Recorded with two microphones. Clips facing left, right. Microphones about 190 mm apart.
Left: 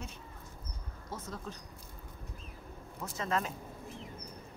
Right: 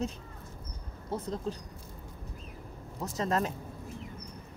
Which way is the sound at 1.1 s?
35° right (ahead or behind).